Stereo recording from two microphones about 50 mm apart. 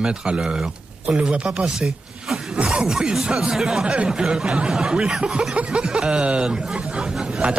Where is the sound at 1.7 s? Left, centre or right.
Centre.